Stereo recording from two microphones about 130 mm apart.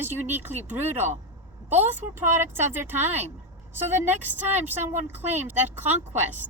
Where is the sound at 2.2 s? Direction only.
15° right (ahead or behind).